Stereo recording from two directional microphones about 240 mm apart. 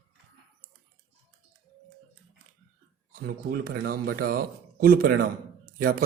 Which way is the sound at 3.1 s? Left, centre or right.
Right.